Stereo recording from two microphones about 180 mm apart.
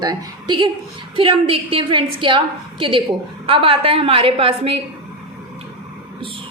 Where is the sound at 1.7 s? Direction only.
30° right (ahead or behind).